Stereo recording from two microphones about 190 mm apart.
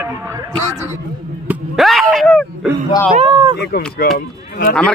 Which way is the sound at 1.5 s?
Centre (ahead or behind).